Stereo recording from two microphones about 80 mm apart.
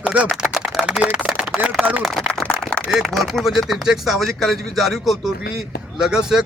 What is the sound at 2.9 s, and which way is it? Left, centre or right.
A man's voice, centre.